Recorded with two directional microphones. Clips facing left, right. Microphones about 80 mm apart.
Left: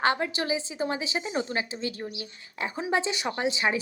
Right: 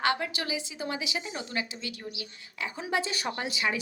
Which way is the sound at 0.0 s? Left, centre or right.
Left.